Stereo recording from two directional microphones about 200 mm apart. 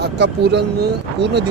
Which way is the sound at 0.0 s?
55° right (ahead or behind).